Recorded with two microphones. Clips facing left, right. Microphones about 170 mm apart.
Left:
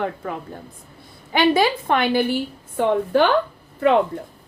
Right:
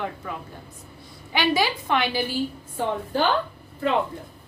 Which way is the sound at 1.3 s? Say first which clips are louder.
Left 6 dB; 50° left (ahead or behind).